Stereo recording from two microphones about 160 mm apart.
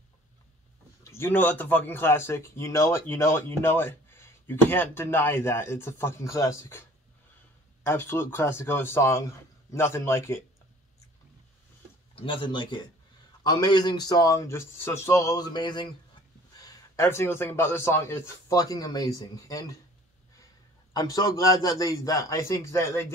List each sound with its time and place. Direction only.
1.0 s speech: 15° left (ahead or behind)
7.8 s speech: 15° left (ahead or behind)
12.2 s a man's voice: 30° left (ahead or behind)
20.9 s a man's voice: 25° left (ahead or behind)